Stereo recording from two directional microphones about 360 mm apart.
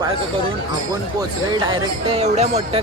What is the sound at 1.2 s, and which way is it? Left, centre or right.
Speech, centre.